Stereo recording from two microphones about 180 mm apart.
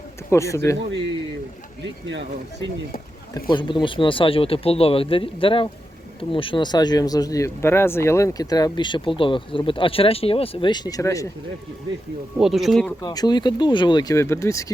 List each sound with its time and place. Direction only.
0.3 s speech: 15° left (ahead or behind)
0.9 s speech: 80° right
3.5 s speech: 25° left (ahead or behind)
12.4 s speech: centre (ahead or behind)
13.0 s speech: 25° left (ahead or behind)